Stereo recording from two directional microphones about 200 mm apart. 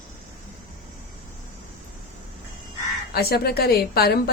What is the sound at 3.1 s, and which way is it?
A woman's voice, 50° left (ahead or behind).